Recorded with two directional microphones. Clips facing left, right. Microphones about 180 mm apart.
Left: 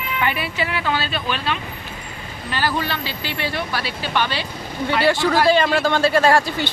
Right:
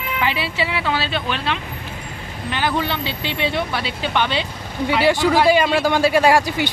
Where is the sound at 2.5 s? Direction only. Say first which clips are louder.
Right 1 dB; 20° right (ahead or behind).